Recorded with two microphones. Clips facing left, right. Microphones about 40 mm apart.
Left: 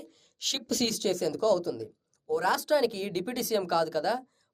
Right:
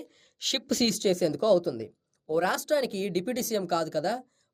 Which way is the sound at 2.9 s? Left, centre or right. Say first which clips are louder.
Right 3 dB; centre.